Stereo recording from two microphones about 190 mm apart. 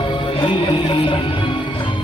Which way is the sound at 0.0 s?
30° left (ahead or behind).